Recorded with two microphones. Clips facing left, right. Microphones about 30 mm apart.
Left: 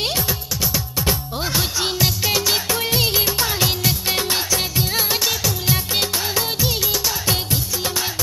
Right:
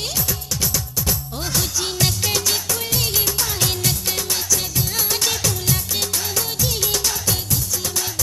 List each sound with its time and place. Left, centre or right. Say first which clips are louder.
0.0 s music: left 3 dB; left
2.0 s music: even; centre
4.1 s music: left 3 dB; left